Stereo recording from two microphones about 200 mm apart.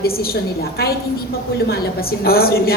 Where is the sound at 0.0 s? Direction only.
50° left (ahead or behind).